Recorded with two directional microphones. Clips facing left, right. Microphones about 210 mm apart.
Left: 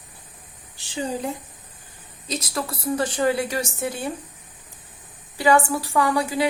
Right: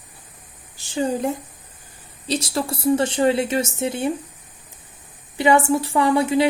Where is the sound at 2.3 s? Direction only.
30° right (ahead or behind).